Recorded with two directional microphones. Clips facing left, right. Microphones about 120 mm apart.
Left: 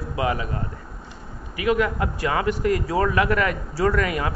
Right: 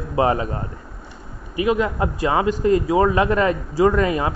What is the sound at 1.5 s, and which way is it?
A man's voice, 25° right (ahead or behind).